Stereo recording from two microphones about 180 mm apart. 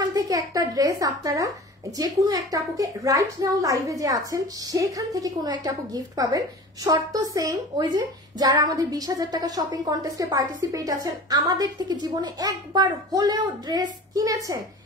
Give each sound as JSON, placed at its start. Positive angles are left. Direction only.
{"t": 0.1, "sound": "speech", "side_deg": -20}